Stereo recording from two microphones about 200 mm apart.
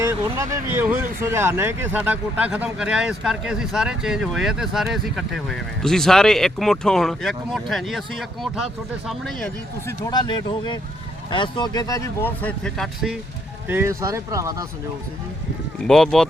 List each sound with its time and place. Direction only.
0.0 s speech: 15° right (ahead or behind); by 9.5 s centre (ahead or behind)
9.8 s speech: 20° left (ahead or behind); by 13.1 s centre (ahead or behind)
13.7 s speech: 10° right (ahead or behind)
15.9 s speech: 5° left (ahead or behind)